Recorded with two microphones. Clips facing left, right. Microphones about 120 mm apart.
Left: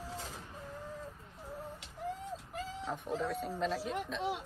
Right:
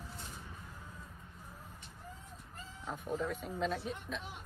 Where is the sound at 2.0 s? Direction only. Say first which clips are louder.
Left 14 dB; 90° left.